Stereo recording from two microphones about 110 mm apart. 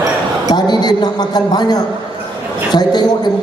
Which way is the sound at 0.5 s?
40° left (ahead or behind).